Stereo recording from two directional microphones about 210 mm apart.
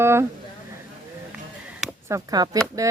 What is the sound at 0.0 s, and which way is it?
Speech, 10° right (ahead or behind).